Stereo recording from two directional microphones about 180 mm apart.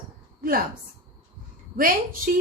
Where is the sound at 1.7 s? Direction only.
50° right (ahead or behind).